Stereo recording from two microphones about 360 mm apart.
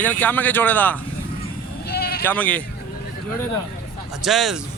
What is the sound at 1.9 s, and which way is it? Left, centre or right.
Bleat, left.